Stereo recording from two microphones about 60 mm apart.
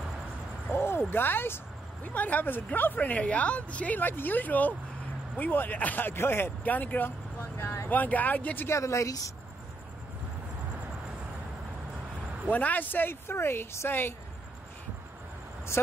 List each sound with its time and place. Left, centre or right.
0.7 s a sound: left
2.0 s a woman's voice: left
6.6 s a woman's voice: left
7.5 s speech: left
7.9 s a woman's voice: left
8.6 s speech: left
12.4 s speech: left
15.7 s speech: left